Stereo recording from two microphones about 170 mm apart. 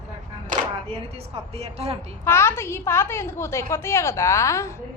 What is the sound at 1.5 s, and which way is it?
Speech, 40° right (ahead or behind).